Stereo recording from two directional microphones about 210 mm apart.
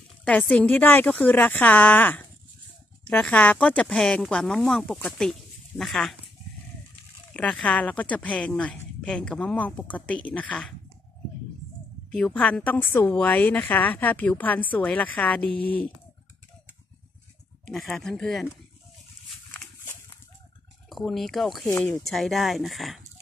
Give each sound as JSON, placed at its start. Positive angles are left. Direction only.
{"t": 0.2, "sound": "a woman's voice", "side_deg": 5}
{"t": 7.3, "sound": "speech", "side_deg": 5}
{"t": 12.1, "sound": "a woman's voice", "side_deg": 5}
{"t": 17.6, "sound": "speech", "side_deg": 0}
{"t": 19.5, "sound": "a sound", "side_deg": 10}
{"t": 20.9, "sound": "speech", "side_deg": 0}
{"t": 21.6, "sound": "a woman's voice", "side_deg": 15}
{"t": 22.0, "sound": "speech", "side_deg": 0}